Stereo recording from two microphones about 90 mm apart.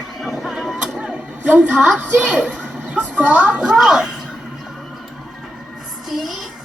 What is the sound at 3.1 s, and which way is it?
Music, 15° right (ahead or behind).